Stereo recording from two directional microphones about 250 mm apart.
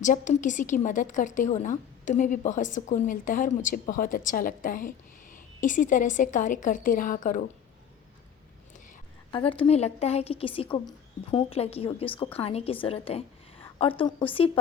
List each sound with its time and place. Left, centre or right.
0.0 s a woman's voice: left
9.3 s a woman's voice: left